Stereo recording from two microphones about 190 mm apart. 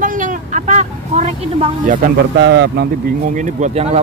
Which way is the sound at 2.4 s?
65° right (ahead or behind).